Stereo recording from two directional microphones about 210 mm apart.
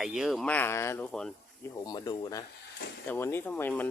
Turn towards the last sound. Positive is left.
turn(degrees=5)  # may be behind; listen again after turning